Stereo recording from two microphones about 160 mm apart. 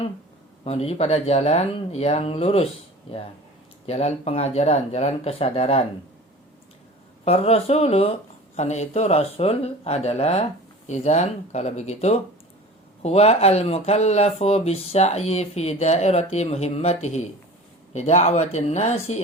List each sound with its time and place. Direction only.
0.6 s speech: 40° left (ahead or behind)
3.8 s speech: 45° left (ahead or behind)
7.3 s speech: 40° left (ahead or behind)